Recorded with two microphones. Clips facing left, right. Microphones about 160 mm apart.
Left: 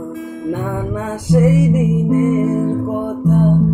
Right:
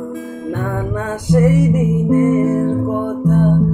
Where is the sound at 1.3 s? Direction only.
5° left (ahead or behind).